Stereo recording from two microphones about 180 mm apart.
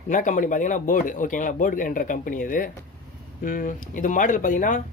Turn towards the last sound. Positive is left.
turn(degrees=45)  # may be behind; listen again after turning